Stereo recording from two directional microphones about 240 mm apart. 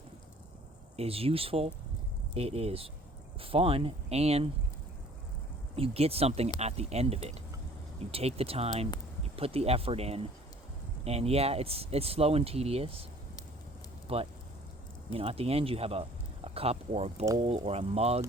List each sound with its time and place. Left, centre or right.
0.9 s speech: right
5.7 s speech: right
14.1 s speech: right